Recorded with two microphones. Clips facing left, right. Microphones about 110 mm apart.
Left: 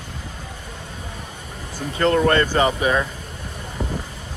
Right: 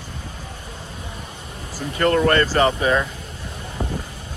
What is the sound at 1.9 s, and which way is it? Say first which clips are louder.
Speech: even; 25° left (ahead or behind).